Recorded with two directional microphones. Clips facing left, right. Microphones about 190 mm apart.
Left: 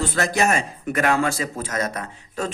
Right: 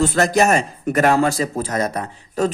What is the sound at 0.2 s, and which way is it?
Speech, 40° right (ahead or behind).